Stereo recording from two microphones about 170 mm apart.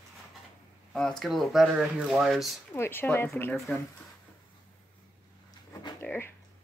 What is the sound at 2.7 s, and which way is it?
Speech, 15° left (ahead or behind).